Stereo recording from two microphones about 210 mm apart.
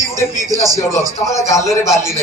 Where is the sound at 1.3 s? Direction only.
15° left (ahead or behind).